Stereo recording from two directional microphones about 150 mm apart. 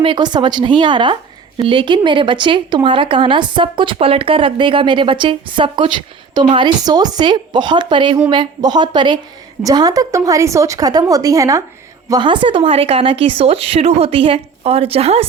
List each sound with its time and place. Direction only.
0.0 s a woman's voice: 30° right (ahead or behind)